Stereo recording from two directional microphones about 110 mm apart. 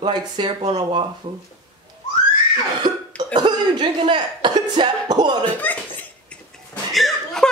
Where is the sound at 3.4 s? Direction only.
40° right (ahead or behind).